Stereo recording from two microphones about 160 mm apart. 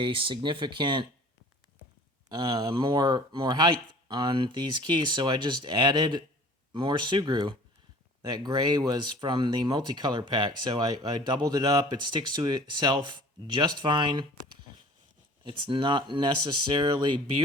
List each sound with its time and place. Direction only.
0.0 s speech: 35° right (ahead or behind)
2.3 s speech: 25° right (ahead or behind)
15.4 s speech: 30° right (ahead or behind)